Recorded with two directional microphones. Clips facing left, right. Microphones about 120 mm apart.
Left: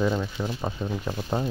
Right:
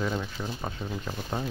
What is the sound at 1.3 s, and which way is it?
Speech, 20° left (ahead or behind).